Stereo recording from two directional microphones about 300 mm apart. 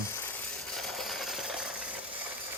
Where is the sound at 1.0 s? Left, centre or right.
Centre.